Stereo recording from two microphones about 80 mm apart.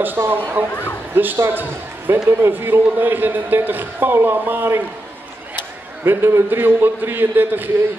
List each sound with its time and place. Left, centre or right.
0.2 s a man's voice: right
6.0 s a man's voice: right